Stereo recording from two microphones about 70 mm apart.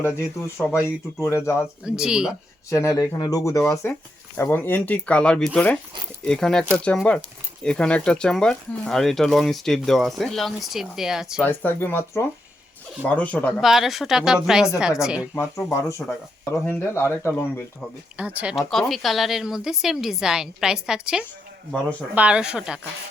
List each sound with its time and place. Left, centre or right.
0.0 s speech: left
1.8 s a woman's voice: centre
2.6 s speech: left
3.8 s speech: left; by 11.4 s centre
11.4 s speech: left
13.0 s speech: left
13.6 s a woman's voice: centre
15.4 s speech: left
18.2 s speech: centre
18.5 s a woman's voice: centre